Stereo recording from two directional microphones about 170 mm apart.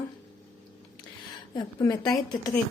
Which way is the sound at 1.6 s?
20° left (ahead or behind).